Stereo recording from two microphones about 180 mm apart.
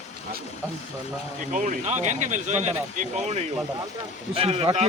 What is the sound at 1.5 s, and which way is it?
Speech, 45° right (ahead or behind).